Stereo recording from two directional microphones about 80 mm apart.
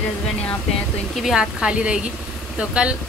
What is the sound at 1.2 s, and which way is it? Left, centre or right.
A woman's voice, centre.